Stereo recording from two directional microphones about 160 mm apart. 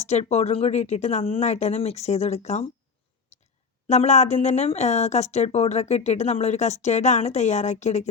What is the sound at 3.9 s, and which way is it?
A woman's voice, 45° left (ahead or behind).